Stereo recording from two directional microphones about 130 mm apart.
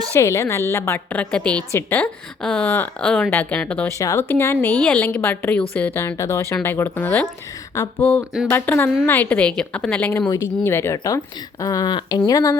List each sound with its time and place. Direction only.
0.1 s a woman's voice: 20° left (ahead or behind)
3.9 s a woman's voice: 25° left (ahead or behind)
7.7 s a woman's voice: 25° left (ahead or behind)